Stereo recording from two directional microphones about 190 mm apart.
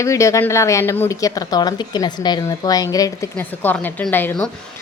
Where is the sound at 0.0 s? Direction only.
15° left (ahead or behind).